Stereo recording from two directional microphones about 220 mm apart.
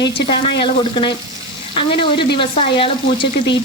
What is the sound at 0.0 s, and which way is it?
Frying, 25° left (ahead or behind).